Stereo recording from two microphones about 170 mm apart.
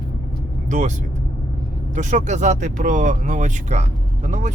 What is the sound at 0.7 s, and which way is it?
Speech, 45° right (ahead or behind).